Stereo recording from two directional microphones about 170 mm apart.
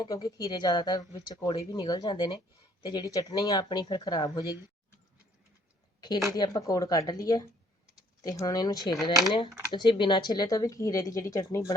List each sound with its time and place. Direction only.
0.0 s speech: 20° left (ahead or behind)
6.3 s speech: 20° left (ahead or behind)